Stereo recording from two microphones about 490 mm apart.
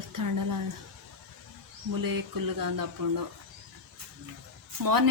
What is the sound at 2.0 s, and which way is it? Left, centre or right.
Speech, right.